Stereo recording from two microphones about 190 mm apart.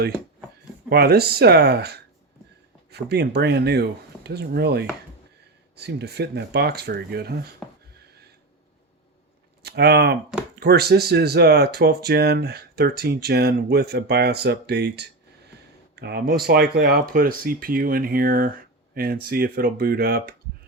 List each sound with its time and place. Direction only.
0.9 s speech: 55° right (ahead or behind)
9.6 s speech: 60° right (ahead or behind)